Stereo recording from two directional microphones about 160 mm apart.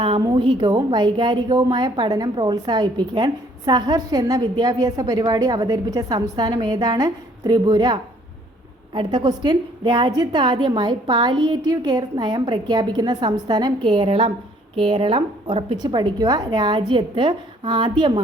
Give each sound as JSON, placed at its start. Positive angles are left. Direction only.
{"t": 0.0, "sound": "a woman's voice", "side_deg": -30}